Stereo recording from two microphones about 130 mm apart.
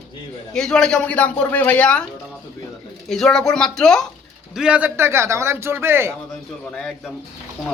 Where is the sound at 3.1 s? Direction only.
5° left (ahead or behind).